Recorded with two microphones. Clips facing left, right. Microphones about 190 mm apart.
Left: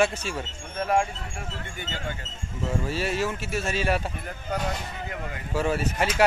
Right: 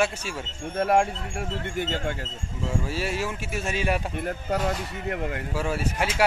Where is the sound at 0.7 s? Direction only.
70° right (ahead or behind).